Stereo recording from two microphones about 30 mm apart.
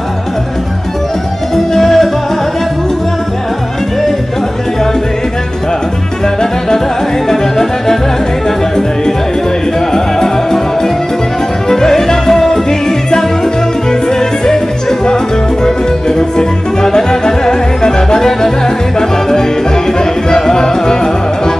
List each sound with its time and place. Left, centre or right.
1.5 s music: centre
6.2 s music: centre
9.8 s music: centre